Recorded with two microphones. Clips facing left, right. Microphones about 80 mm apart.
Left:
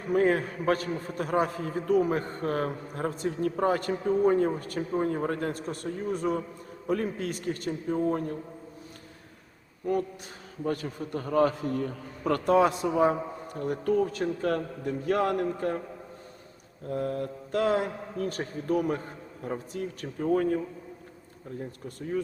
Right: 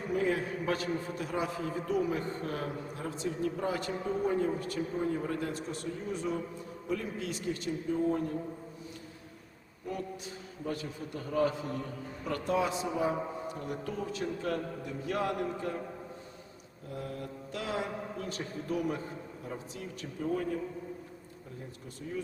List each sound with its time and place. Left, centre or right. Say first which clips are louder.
0.1 s a man's voice: left 7 dB; left
10.6 s a man's voice: left 6 dB; left
16.9 s a man's voice: left 9 dB; left
21.8 s a man's voice: left 7 dB; left